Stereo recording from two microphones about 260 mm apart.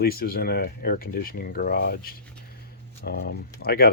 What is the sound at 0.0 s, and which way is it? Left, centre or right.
Speech, left.